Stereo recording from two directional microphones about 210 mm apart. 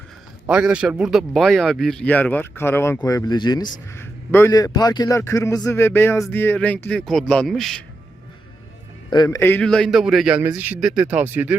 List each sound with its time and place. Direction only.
0.4 s a man's voice: 5° right (ahead or behind)
9.0 s a man's voice: 20° left (ahead or behind); by 11.5 s 5° right (ahead or behind)